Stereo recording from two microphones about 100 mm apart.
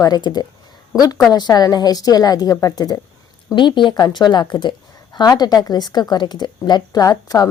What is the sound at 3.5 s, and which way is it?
Speech, 50° left (ahead or behind).